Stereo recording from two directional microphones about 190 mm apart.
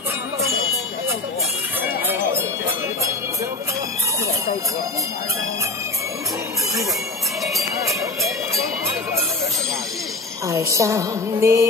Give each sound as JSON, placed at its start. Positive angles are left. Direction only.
{"t": 10.5, "sound": "music", "side_deg": -15}